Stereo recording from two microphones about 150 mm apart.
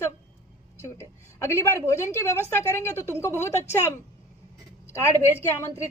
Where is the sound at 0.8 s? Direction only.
20° left (ahead or behind).